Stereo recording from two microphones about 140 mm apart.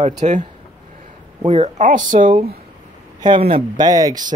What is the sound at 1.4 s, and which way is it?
Speech, 40° right (ahead or behind).